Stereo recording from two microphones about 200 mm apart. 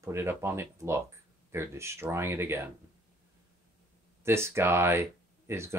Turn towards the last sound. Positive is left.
turn(degrees=-15)  # may be behind; listen again after turning